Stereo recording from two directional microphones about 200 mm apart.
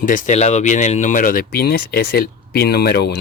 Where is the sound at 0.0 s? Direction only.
40° left (ahead or behind).